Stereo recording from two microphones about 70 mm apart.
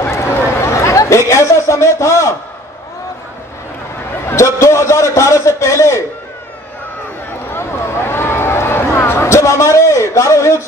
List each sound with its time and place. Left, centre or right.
0.0 s chatter: left
4.3 s a man's voice: left
7.5 s a sound: left